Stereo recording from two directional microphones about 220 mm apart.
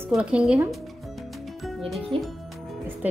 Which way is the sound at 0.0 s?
5° right (ahead or behind).